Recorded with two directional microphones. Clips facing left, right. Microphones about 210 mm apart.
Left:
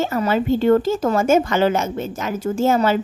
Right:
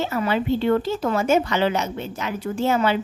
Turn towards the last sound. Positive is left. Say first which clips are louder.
# left 3 dB
turn(degrees=45)  # may be behind; listen again after turning